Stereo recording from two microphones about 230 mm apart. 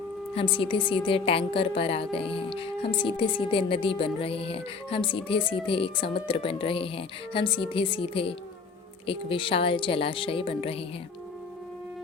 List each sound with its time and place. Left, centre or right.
0.3 s speech: left